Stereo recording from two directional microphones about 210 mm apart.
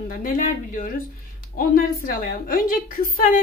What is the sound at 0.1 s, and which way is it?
A woman's voice, 40° left (ahead or behind).